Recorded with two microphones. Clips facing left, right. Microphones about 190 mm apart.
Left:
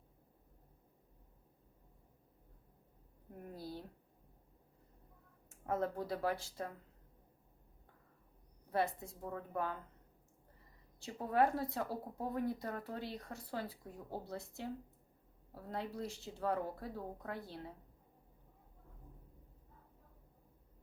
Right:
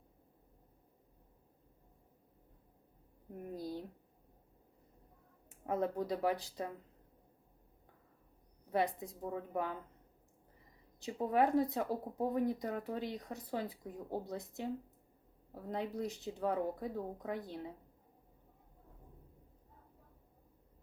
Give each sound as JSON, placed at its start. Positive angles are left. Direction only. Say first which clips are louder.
{"t": 3.5, "sound": "a sound", "louder": "right 5 dB", "side_deg": -15}
{"t": 5.6, "sound": "speech", "louder": "right 2 dB", "side_deg": -15}
{"t": 8.7, "sound": "speech", "louder": "right 2 dB", "side_deg": -15}
{"t": 11.0, "sound": "speech", "louder": "right 2 dB", "side_deg": -15}